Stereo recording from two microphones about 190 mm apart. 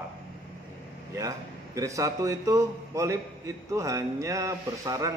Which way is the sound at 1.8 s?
15° right (ahead or behind).